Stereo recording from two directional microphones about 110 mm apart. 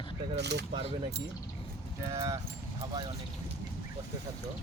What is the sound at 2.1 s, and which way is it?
Speech, 30° right (ahead or behind).